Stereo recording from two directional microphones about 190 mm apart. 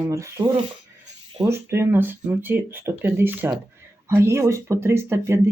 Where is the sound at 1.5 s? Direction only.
15° right (ahead or behind).